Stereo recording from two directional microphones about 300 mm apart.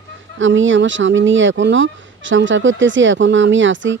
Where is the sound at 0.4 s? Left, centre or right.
Right.